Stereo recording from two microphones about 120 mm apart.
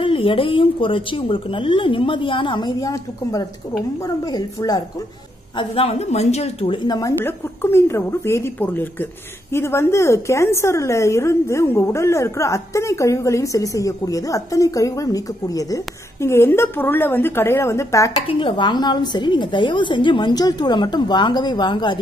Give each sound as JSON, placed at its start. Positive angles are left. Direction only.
{"t": 0.0, "sound": "a woman's voice", "side_deg": 50}
{"t": 5.6, "sound": "a woman's voice", "side_deg": 55}
{"t": 7.0, "sound": "a woman's voice", "side_deg": 25}
{"t": 18.2, "sound": "a woman's voice", "side_deg": 40}